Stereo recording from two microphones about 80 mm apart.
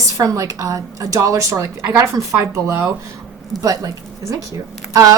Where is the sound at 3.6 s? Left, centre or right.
Right.